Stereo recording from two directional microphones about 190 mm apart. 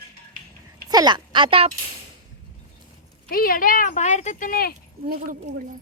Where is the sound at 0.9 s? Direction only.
20° right (ahead or behind).